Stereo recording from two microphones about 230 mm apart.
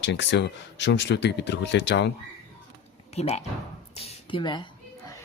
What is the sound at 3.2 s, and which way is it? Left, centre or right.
Speech, left.